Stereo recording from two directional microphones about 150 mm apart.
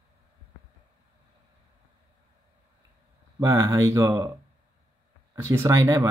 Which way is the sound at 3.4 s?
20° right (ahead or behind).